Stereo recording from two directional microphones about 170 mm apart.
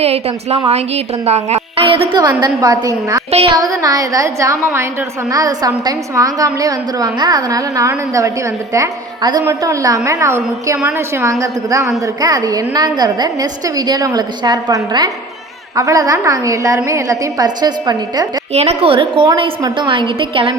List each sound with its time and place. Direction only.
0.0 s a woman's voice: 35° right (ahead or behind); by 3.2 s 20° right (ahead or behind)
3.3 s a woman's voice: 35° right (ahead or behind)
3.6 s a woman's voice: 20° right (ahead or behind)
18.5 s a woman's voice: 40° right (ahead or behind)